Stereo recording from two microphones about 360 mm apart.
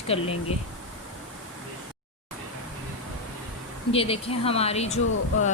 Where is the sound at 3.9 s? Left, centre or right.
Centre.